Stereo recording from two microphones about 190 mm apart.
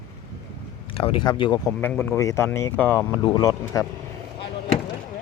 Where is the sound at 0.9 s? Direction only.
30° left (ahead or behind).